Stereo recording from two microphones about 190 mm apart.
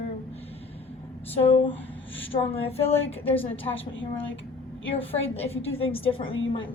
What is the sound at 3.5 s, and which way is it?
Speech, 90° left.